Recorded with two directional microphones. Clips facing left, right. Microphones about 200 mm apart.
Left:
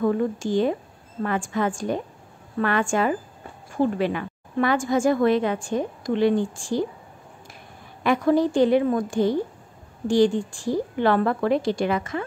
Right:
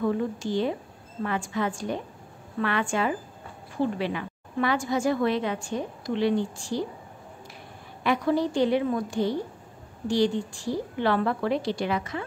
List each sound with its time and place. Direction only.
0.0 s a woman's voice: 50° left (ahead or behind)
8.0 s a woman's voice: 50° left (ahead or behind)